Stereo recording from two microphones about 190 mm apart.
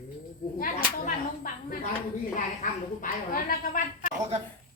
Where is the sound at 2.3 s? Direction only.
45° left (ahead or behind).